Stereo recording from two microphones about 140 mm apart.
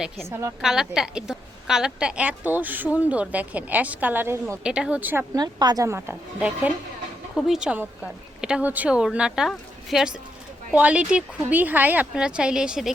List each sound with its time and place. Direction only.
0.3 s a woman's voice: 20° right (ahead or behind)
0.6 s a woman's voice: 5° right (ahead or behind)
5.3 s a woman's voice: 30° right (ahead or behind); by 12.9 s 5° right (ahead or behind)